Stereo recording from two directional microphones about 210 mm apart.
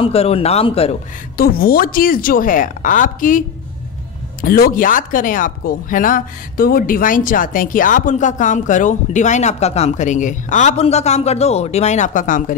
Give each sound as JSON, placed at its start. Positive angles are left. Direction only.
{"t": 0.0, "sound": "speech", "side_deg": 30}
{"t": 1.3, "sound": "speech", "side_deg": 45}